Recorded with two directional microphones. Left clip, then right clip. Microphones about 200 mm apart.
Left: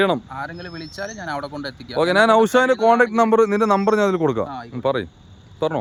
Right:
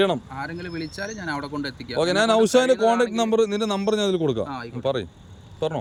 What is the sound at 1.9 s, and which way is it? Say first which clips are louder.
Speech: left 5 dB; 20° left (ahead or behind).